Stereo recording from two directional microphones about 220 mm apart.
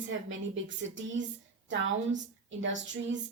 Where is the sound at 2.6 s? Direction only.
55° right (ahead or behind).